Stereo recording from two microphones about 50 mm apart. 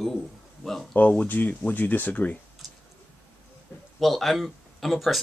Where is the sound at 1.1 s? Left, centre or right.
Left.